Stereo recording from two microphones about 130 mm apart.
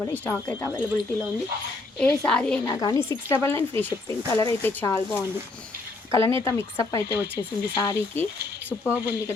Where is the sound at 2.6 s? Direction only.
30° left (ahead or behind).